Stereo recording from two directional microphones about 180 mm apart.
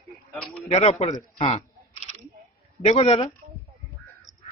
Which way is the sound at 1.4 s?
35° left (ahead or behind).